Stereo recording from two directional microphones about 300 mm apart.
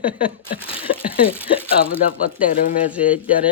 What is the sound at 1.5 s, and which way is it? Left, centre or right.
Speech, centre.